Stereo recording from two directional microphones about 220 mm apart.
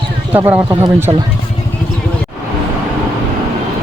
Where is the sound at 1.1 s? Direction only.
20° right (ahead or behind).